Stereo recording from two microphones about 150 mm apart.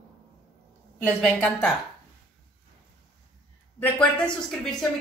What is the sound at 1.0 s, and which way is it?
Speech, 5° left (ahead or behind).